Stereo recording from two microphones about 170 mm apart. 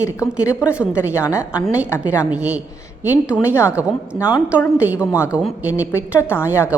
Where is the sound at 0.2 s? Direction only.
5° right (ahead or behind).